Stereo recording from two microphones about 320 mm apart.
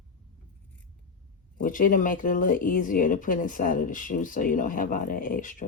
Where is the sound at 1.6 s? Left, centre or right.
Left.